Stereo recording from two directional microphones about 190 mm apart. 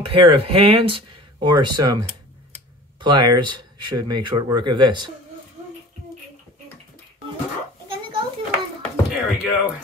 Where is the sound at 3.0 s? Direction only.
25° right (ahead or behind).